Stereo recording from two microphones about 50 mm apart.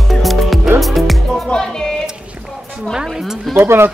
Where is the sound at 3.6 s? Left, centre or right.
Right.